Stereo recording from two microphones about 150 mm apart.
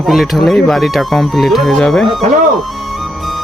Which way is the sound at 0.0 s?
Centre (ahead or behind).